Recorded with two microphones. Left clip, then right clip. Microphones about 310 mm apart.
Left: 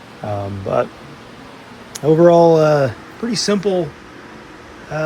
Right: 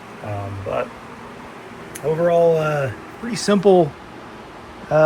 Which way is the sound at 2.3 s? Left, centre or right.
Left.